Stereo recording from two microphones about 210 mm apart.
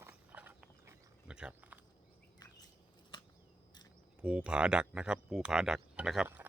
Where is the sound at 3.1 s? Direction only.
20° left (ahead or behind).